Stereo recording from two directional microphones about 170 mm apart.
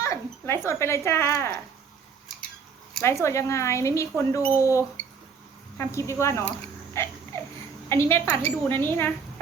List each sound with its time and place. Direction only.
0.0 s speech: 15° left (ahead or behind)
3.0 s speech: 15° left (ahead or behind)
5.0 s a sound: 10° left (ahead or behind)
5.7 s speech: 15° left (ahead or behind)